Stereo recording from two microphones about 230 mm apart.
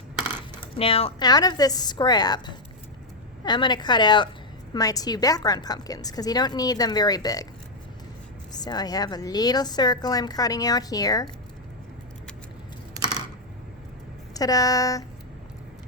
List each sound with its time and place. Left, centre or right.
0.8 s a woman's voice: left
8.5 s a woman's voice: centre
14.3 s a woman's voice: centre